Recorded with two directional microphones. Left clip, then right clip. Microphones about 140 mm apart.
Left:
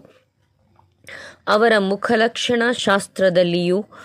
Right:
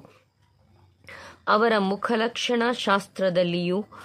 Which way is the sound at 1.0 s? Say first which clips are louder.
Left 4 dB; 30° left (ahead or behind).